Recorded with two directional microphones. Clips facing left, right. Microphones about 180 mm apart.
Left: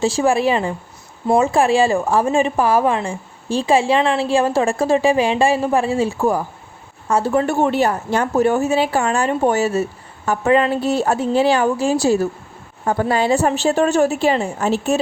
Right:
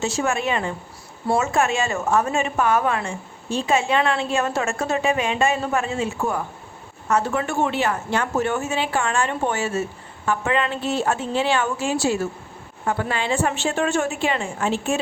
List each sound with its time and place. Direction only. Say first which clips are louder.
0.0 s a woman's voice: left 7 dB; 30° left (ahead or behind)